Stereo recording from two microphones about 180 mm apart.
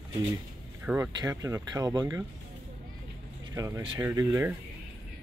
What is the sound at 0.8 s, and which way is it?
Speech, 10° right (ahead or behind).